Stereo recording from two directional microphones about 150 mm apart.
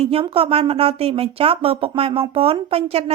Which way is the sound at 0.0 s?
40° right (ahead or behind).